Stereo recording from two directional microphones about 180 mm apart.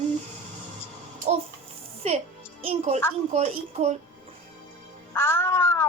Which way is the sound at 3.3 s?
35° right (ahead or behind).